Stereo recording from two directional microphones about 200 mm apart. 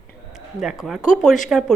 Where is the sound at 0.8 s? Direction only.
Centre (ahead or behind).